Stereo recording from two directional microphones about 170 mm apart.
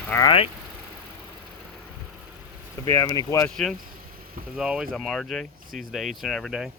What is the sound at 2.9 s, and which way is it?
Speech, 20° left (ahead or behind).